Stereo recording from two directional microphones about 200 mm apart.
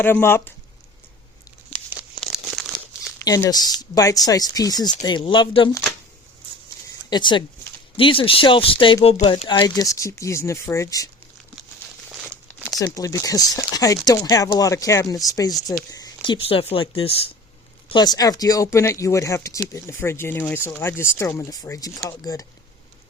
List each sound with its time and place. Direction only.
0.0 s speech: 10° left (ahead or behind)
2.2 s crumpling: centre (ahead or behind)
3.2 s speech: 20° left (ahead or behind)
7.1 s speech: 25° left (ahead or behind)
12.8 s speech: 15° left (ahead or behind)